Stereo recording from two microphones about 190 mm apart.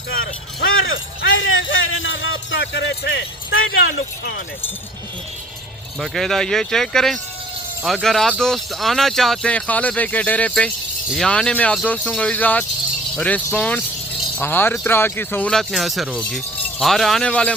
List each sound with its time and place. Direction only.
0.1 s a sound: 90° left
3.8 s speech: 60° left (ahead or behind)
6.0 s speech: centre (ahead or behind)